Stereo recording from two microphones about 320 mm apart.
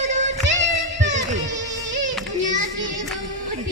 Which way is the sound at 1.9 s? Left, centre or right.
Right.